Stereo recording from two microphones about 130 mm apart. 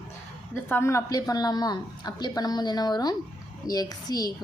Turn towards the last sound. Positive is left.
turn(degrees=30)  # may be behind; listen again after turning